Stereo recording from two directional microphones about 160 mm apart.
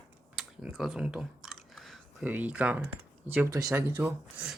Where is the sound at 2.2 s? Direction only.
10° right (ahead or behind).